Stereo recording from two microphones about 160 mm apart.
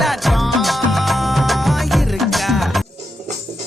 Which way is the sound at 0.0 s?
Centre (ahead or behind).